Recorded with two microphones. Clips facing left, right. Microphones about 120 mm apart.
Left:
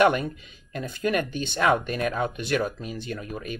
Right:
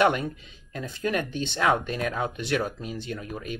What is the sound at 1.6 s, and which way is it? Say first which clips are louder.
Speech: left 2 dB; 55° left (ahead or behind).